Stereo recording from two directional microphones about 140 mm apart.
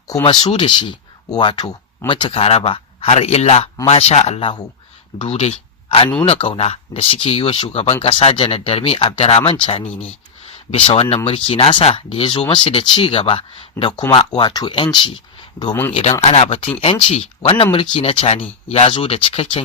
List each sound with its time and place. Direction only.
0.2 s speech: 30° left (ahead or behind)
16.2 s speech: 45° left (ahead or behind)